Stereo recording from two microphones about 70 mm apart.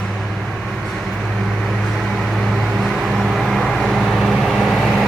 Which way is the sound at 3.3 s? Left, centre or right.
Centre.